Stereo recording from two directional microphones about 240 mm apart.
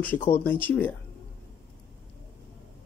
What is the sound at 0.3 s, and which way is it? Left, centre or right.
Speech, centre.